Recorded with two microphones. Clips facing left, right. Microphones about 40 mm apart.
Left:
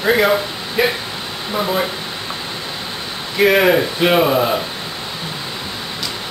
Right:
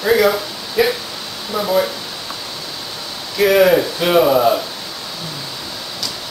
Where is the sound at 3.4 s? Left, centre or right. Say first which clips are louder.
Right 1 dB; left.